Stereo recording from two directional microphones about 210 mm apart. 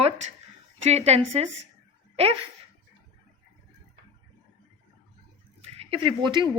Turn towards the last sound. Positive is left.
turn(degrees=-20)  # may be behind; listen again after turning